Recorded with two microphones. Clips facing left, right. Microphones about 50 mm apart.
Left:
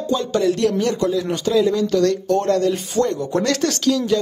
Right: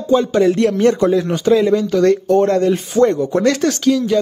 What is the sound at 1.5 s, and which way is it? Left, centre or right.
Speech, right.